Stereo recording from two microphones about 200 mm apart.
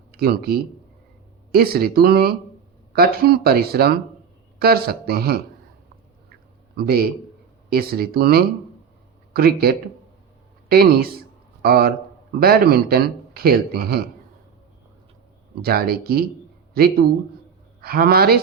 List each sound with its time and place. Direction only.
0.1 s speech: 50° right (ahead or behind)
6.7 s a man's voice: 50° right (ahead or behind)
15.6 s a woman's voice: 50° right (ahead or behind)